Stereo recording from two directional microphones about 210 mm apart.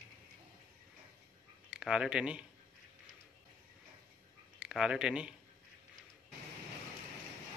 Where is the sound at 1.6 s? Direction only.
5° right (ahead or behind).